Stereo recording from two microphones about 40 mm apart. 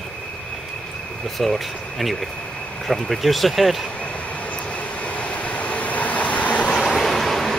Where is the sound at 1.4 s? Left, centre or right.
Centre.